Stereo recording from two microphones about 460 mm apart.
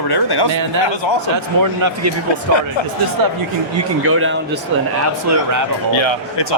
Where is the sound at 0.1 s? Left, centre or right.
Left.